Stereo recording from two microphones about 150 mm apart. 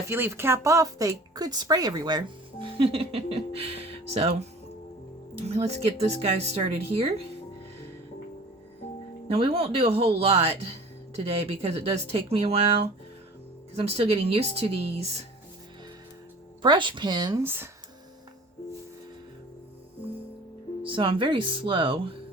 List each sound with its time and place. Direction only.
0.0 s speech: 15° right (ahead or behind); by 7.1 s 40° right (ahead or behind)
9.3 s speech: 40° right (ahead or behind)
16.6 s speech: 30° right (ahead or behind)
17.4 s speech: 15° right (ahead or behind)
20.8 s speech: 35° right (ahead or behind)